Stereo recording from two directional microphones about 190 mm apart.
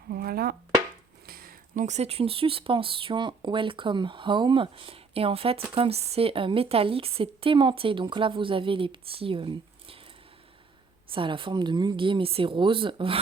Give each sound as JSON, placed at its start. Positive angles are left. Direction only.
{"t": 0.1, "sound": "a sound", "side_deg": -55}
{"t": 1.3, "sound": "speech", "side_deg": -50}
{"t": 11.1, "sound": "speech", "side_deg": -25}